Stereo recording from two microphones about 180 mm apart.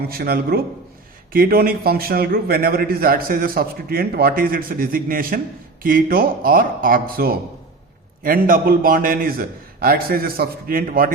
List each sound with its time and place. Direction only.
0.1 s a man's voice: 55° right (ahead or behind)